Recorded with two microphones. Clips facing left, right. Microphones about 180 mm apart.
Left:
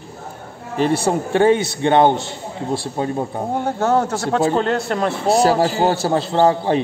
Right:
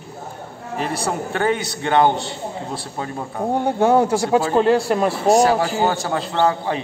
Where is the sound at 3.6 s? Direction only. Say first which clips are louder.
Right 3 dB; 10° right (ahead or behind).